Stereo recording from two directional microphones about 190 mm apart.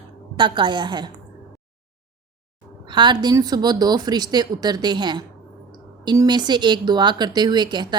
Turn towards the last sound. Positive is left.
turn(degrees=-25)  # may be behind; listen again after turning